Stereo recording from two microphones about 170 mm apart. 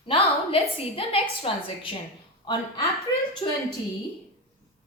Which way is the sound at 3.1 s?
20° left (ahead or behind).